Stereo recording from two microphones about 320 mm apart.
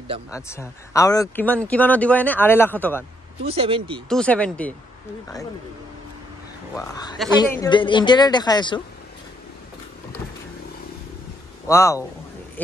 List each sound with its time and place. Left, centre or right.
0.3 s speech: centre
3.4 s speech: centre
4.1 s speech: centre
6.7 s speech: centre
11.6 s speech: centre